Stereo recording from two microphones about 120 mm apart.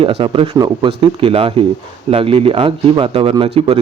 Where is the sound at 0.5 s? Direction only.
40° right (ahead or behind).